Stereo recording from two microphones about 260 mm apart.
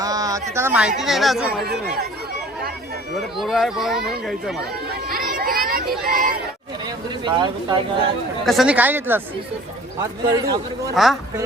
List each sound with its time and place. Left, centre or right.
0.0 s speech: centre
3.2 s speech: centre
4.9 s a sound: right
6.1 s speech: right
6.8 s speech: centre
8.4 s a man's voice: centre
10.9 s speech: centre